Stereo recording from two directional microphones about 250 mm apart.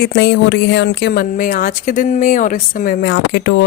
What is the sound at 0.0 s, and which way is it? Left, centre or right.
A woman's voice, left.